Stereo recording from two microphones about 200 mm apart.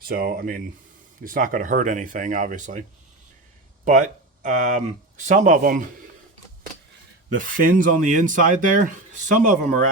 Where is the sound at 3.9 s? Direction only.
40° right (ahead or behind).